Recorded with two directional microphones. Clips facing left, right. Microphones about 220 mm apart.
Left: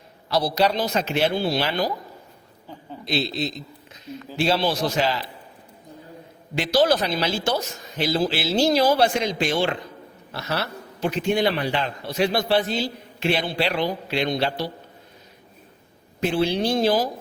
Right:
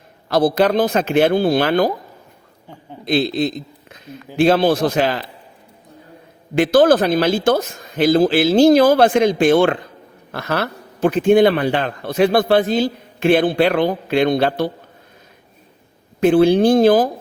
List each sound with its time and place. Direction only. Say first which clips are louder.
0.3 s a man's voice: right 6 dB; 50° right (ahead or behind)
3.0 s a man's voice: right 8 dB; 50° right (ahead or behind)
6.6 s a man's voice: right 8 dB; 50° right (ahead or behind)
16.2 s a man's voice: right 10 dB; 50° right (ahead or behind)